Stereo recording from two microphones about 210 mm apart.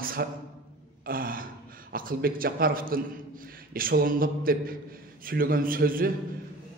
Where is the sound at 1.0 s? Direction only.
45° right (ahead or behind).